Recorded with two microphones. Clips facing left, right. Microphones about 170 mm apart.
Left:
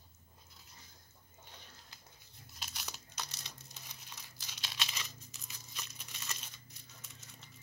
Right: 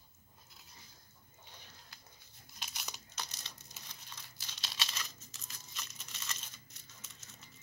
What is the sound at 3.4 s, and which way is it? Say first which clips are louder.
Crumpling: left 1 dB; 10° left (ahead or behind).